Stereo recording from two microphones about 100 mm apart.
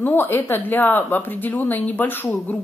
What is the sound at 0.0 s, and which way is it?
A woman's voice, 20° left (ahead or behind).